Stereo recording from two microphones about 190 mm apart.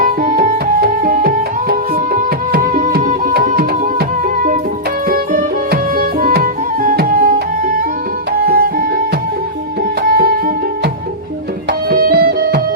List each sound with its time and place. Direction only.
0.0 s music: 50° right (ahead or behind)
5.0 s music: 50° right (ahead or behind)
10.0 s music: 50° right (ahead or behind)
11.9 s music: 55° right (ahead or behind)